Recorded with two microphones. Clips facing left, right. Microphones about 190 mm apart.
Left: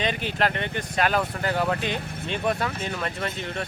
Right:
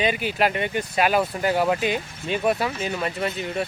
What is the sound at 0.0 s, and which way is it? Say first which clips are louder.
Speech: right 3 dB; 10° right (ahead or behind).